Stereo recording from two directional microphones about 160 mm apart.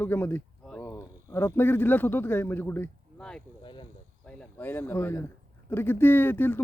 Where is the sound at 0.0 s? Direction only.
15° left (ahead or behind).